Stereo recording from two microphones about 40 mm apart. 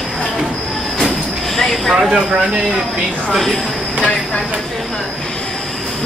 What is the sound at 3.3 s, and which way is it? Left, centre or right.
Speech, centre.